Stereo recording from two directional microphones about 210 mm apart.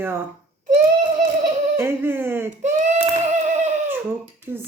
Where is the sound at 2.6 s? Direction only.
35° right (ahead or behind).